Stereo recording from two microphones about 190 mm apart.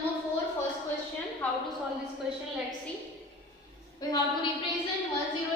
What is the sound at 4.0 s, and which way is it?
Speech, 20° left (ahead or behind).